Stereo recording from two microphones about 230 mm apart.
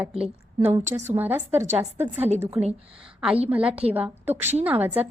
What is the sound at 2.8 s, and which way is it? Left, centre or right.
A woman's voice, centre.